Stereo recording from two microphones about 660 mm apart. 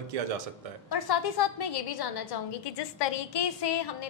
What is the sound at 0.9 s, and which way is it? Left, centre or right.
A woman's voice, left.